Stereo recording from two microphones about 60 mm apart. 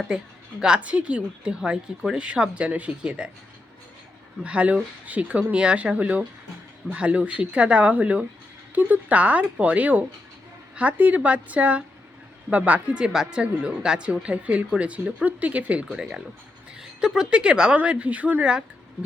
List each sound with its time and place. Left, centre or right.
0.6 s a woman's voice: centre
4.4 s a woman's voice: right
15.9 s a woman's voice: centre; by 18.4 s right